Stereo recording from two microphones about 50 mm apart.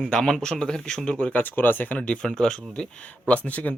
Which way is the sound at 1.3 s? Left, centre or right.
Left.